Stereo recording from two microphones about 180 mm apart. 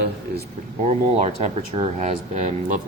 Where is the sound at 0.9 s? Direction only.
35° right (ahead or behind).